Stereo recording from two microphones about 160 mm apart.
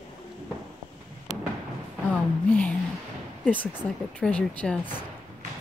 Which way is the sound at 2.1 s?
10° left (ahead or behind).